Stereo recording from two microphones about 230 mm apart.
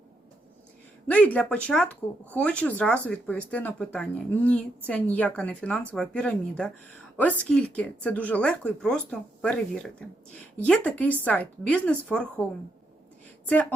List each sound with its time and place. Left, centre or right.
1.0 s speech: centre
13.5 s speech: centre